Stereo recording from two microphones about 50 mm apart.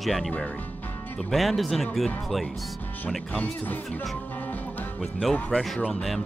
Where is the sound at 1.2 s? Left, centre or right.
Centre.